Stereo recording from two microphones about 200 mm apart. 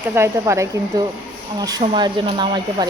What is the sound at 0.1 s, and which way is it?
A woman's voice, 15° right (ahead or behind).